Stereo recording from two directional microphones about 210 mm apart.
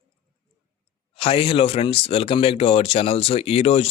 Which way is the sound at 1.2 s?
25° left (ahead or behind).